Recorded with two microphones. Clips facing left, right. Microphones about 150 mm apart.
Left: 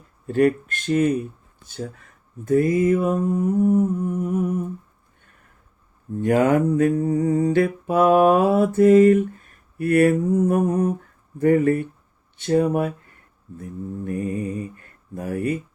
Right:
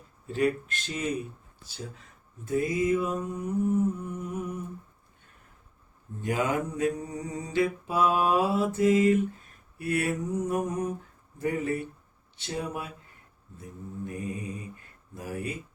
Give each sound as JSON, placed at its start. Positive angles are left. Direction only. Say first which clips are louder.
{"t": 0.3, "sound": "humming", "louder": "left 8 dB", "side_deg": 55}
{"t": 2.5, "sound": "humming", "louder": "left 8 dB", "side_deg": 55}
{"t": 6.2, "sound": "mantra", "louder": "left 11 dB", "side_deg": 60}
{"t": 12.4, "sound": "humming", "louder": "left 14 dB", "side_deg": 55}
{"t": 13.6, "sound": "mantra", "louder": "left 7 dB", "side_deg": 55}